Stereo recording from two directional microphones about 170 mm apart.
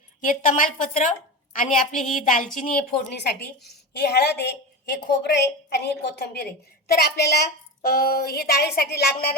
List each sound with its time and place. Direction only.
0.2 s a woman's voice: 50° left (ahead or behind)
1.7 s a woman's voice: 5° left (ahead or behind)
2.2 s a woman's voice: 50° left (ahead or behind)
2.6 s a woman's voice: 65° left (ahead or behind)